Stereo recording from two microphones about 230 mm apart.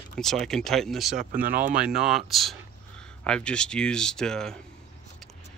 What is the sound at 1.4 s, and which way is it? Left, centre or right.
Speech, right.